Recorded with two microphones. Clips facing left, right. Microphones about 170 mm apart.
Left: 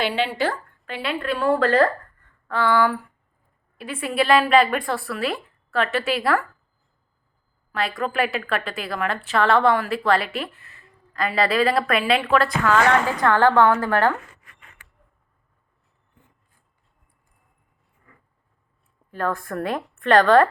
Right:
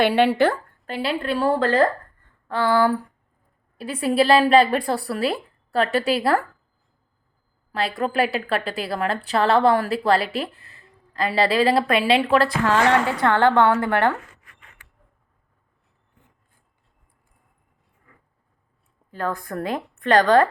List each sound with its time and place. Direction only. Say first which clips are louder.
0.0 s a woman's voice: right 6 dB; 60° right (ahead or behind)
0.9 s a woman's voice: right 2 dB; 35° right (ahead or behind)
7.7 s a woman's voice: right 1 dB; 30° right (ahead or behind)
19.4 s a woman's voice: even; 35° right (ahead or behind)